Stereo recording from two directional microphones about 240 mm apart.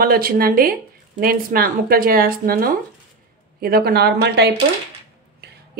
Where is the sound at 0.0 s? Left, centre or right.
Right.